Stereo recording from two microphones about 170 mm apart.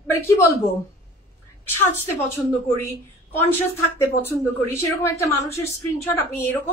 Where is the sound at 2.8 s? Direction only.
10° left (ahead or behind).